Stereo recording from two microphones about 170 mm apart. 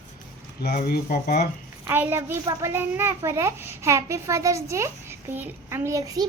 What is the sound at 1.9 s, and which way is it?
A child's voice, 10° right (ahead or behind).